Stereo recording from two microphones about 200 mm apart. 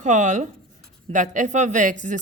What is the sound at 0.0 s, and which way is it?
A woman's voice, 35° right (ahead or behind).